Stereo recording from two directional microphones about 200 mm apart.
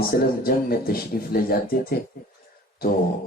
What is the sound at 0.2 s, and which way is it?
Speech, 50° left (ahead or behind).